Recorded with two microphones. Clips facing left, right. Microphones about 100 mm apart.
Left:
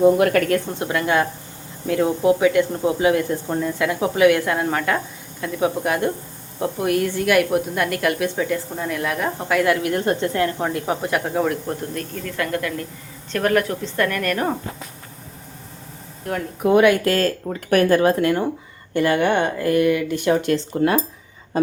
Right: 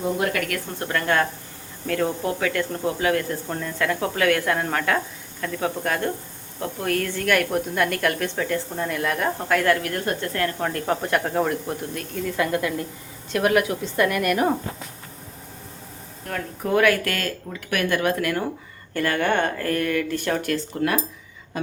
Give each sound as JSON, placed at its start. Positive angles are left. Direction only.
{"t": 0.3, "sound": "a woman's voice", "side_deg": 30}
{"t": 0.7, "sound": "a woman's voice", "side_deg": 15}
{"t": 9.8, "sound": "speech", "side_deg": 25}
{"t": 12.4, "sound": "a woman's voice", "side_deg": -20}
{"t": 16.2, "sound": "speech", "side_deg": 15}
{"t": 21.5, "sound": "a sound", "side_deg": 35}